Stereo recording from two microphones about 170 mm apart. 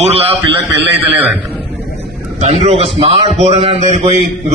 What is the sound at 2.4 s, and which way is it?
A man's voice, 40° right (ahead or behind).